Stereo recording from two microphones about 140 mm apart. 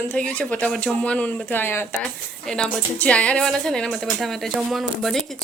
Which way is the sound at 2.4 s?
5° left (ahead or behind).